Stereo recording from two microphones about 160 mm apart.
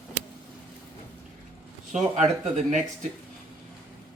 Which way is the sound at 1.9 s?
50° right (ahead or behind).